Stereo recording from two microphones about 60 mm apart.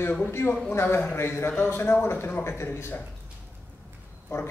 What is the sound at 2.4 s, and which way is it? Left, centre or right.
Speech, left.